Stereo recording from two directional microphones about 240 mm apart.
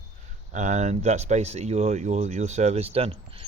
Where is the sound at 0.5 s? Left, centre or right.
Right.